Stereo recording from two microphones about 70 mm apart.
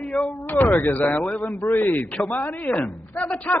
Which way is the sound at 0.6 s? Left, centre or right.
Left.